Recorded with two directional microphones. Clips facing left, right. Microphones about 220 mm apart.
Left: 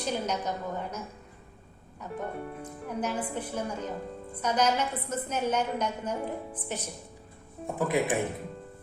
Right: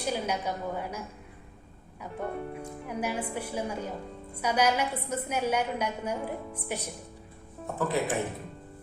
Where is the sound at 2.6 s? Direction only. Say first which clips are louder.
Left 2 dB; 10° right (ahead or behind).